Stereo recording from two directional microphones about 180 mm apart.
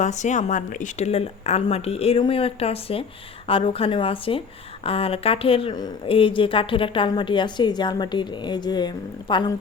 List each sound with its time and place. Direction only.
0.0 s a woman's voice: 40° left (ahead or behind); by 9.4 s 25° left (ahead or behind)